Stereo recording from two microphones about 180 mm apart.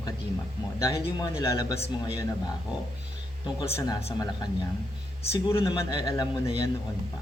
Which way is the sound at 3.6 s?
20° left (ahead or behind).